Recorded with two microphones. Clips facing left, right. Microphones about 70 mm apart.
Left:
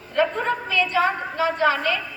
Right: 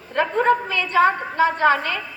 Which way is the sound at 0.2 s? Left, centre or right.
Right.